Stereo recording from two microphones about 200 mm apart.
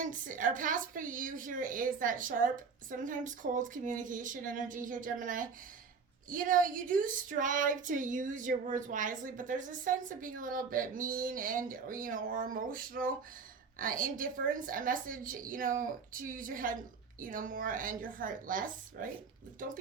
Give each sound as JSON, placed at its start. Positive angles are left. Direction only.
{"t": 0.0, "sound": "a woman's voice", "side_deg": -40}